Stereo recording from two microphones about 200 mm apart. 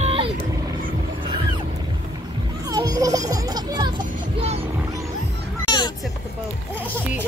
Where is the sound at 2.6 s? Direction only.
20° right (ahead or behind).